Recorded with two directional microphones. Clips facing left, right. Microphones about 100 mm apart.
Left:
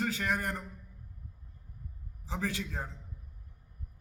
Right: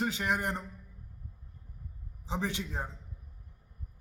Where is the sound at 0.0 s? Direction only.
20° right (ahead or behind).